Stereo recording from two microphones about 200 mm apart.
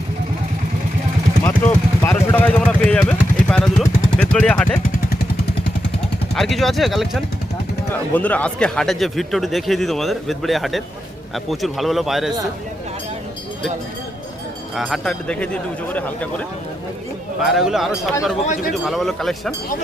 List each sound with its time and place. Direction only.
2.0 s a sound: 10° left (ahead or behind)
6.3 s speech: centre (ahead or behind)
14.8 s speech: centre (ahead or behind)
17.4 s speech: centre (ahead or behind)
18.4 s speech: 40° left (ahead or behind)
18.9 s speech: centre (ahead or behind)